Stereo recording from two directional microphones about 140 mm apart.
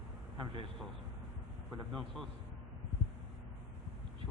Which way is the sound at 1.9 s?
5° left (ahead or behind).